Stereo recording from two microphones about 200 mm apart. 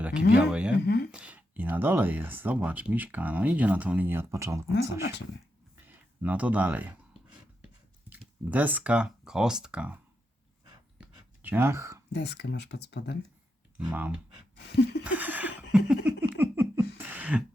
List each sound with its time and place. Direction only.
0.0 s speech: 5° right (ahead or behind)
0.9 s speech: 55° left (ahead or behind)
1.1 s speech: 5° right (ahead or behind)
5.7 s a sound: 10° right (ahead or behind)
8.1 s speech: 10° right (ahead or behind)
10.9 s a sound: 5° right (ahead or behind)
12.1 s speech: 55° left (ahead or behind)
13.7 s speech: 5° right (ahead or behind)
14.5 s chuckle: 55° left (ahead or behind)
15.0 s a sound: 10° right (ahead or behind)
17.1 s cough: 5° right (ahead or behind)